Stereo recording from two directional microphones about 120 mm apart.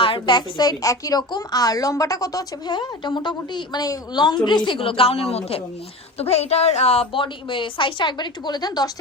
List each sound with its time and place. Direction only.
0.0 s a woman's voice: 40° left (ahead or behind)